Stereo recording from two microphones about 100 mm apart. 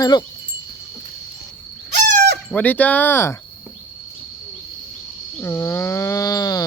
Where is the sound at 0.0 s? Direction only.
40° left (ahead or behind).